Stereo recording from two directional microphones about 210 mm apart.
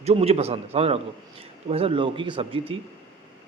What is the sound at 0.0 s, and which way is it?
Speech, 30° right (ahead or behind).